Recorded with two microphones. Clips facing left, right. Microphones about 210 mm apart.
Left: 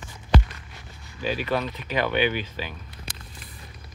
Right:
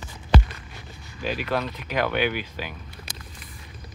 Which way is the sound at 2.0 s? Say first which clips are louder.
Even; 10° right (ahead or behind).